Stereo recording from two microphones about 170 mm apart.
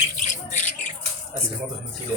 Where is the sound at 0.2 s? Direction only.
45° left (ahead or behind).